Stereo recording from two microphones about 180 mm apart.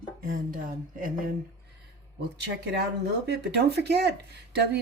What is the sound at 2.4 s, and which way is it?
A woman's voice, 70° right (ahead or behind).